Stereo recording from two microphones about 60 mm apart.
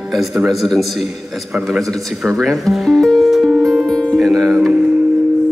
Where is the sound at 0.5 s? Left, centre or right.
Centre.